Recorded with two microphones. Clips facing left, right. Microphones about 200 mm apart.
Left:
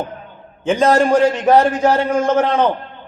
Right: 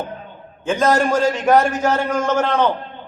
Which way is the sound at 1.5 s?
30° left (ahead or behind).